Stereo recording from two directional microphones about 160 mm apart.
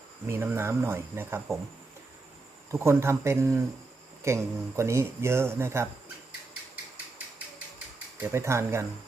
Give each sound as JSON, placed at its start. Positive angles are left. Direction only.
{"t": 0.3, "sound": "speech", "side_deg": -15}
{"t": 2.7, "sound": "speech", "side_deg": -15}
{"t": 8.2, "sound": "speech", "side_deg": -15}